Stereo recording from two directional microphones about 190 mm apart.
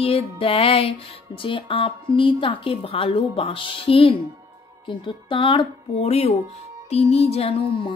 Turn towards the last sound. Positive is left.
turn(degrees=30)  # may be behind; listen again after turning